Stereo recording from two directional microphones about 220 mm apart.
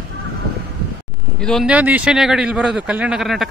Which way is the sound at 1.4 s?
Centre (ahead or behind).